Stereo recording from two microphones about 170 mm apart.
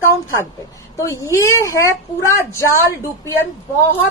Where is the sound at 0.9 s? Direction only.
15° left (ahead or behind).